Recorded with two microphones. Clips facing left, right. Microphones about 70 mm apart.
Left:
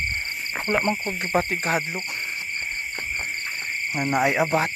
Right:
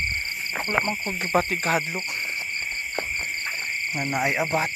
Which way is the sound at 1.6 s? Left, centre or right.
Centre.